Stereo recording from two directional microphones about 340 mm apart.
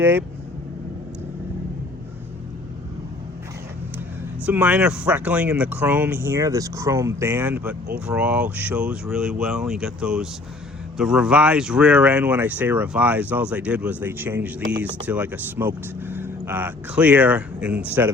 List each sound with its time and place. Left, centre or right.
0.0 s speech: centre
4.4 s speech: centre